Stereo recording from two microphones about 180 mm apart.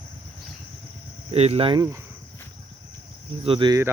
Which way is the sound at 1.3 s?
35° right (ahead or behind).